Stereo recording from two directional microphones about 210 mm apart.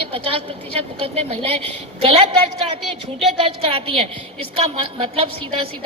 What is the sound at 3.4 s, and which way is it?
A woman's voice, 25° right (ahead or behind).